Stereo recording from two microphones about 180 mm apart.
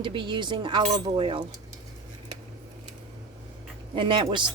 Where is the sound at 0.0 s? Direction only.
25° right (ahead or behind).